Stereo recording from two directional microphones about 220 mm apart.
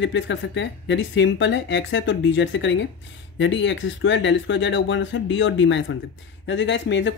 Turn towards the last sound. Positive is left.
turn(degrees=55)  # may be behind; listen again after turning